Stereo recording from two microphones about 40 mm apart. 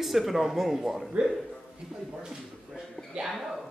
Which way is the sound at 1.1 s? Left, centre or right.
Right.